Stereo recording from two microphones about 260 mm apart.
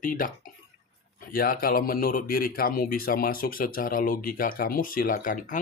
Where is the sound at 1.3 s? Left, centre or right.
Left.